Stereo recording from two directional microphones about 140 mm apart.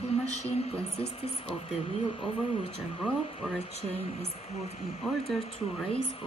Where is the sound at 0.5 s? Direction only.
50° left (ahead or behind).